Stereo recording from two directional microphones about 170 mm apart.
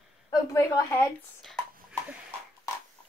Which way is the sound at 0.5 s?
15° left (ahead or behind).